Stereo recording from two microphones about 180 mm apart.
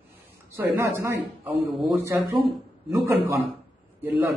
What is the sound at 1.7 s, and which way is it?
Speech, centre (ahead or behind).